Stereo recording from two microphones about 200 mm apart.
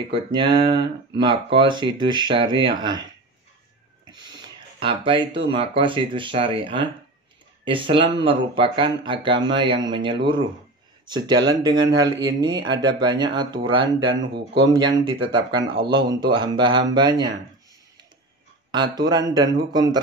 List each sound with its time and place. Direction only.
0.1 s speech: 25° right (ahead or behind)
4.0 s a sound: 20° right (ahead or behind)
5.5 s speech: 25° right (ahead or behind)
18.7 s speech: 20° right (ahead or behind)